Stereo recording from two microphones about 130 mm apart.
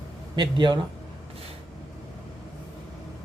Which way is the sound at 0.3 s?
35° right (ahead or behind).